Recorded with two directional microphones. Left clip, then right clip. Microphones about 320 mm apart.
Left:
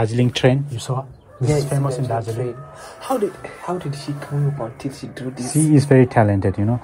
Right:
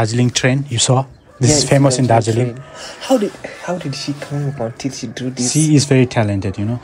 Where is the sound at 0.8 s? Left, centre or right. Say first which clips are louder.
Right 12 dB; right.